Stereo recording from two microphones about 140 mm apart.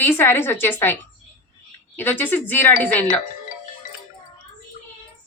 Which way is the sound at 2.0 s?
15° left (ahead or behind).